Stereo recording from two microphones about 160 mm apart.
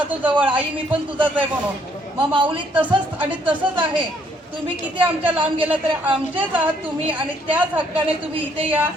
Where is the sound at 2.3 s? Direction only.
30° right (ahead or behind).